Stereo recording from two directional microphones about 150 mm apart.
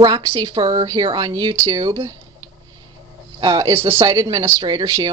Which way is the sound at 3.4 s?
30° right (ahead or behind).